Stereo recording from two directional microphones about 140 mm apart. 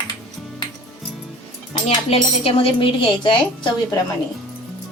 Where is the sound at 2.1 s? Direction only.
40° left (ahead or behind).